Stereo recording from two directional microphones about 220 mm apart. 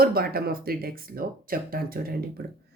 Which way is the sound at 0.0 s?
45° right (ahead or behind).